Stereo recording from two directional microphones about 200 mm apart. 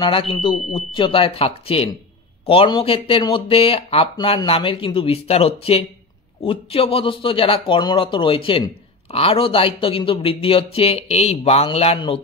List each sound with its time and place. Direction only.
0.0 s speech: 25° left (ahead or behind)